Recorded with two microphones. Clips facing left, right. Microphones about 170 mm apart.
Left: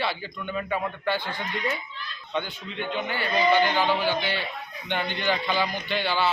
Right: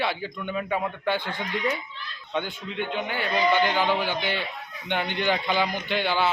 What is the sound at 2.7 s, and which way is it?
A man's voice, 10° right (ahead or behind).